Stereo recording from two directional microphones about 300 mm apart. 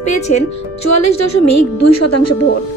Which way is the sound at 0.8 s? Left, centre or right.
Left.